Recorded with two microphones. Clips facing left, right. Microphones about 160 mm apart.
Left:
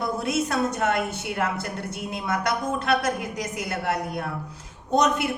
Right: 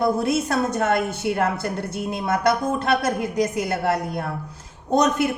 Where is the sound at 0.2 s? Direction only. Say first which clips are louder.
Right 3 dB; 35° right (ahead or behind).